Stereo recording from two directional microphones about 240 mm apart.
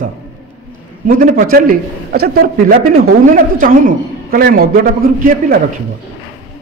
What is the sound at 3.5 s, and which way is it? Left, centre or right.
A man's voice, right.